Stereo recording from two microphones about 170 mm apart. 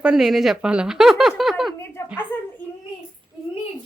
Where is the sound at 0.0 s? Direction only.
5° right (ahead or behind).